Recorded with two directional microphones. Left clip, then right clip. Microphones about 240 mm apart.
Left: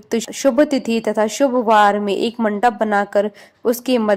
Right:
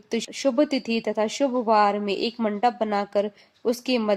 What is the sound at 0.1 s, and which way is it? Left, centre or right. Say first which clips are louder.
A woman's voice: left 7 dB; left.